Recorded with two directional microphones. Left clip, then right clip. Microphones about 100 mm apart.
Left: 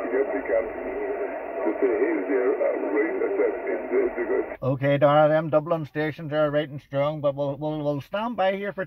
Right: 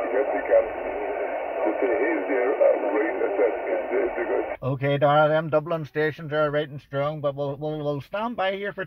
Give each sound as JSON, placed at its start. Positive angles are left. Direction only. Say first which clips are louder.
{"t": 0.1, "sound": "radio", "louder": "right 3 dB", "side_deg": -30}
{"t": 1.6, "sound": "speech", "louder": "even", "side_deg": -30}
{"t": 4.8, "sound": "speech", "louder": "left 1 dB", "side_deg": 25}